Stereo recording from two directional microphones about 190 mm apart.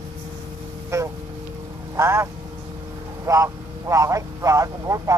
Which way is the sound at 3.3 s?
15° right (ahead or behind).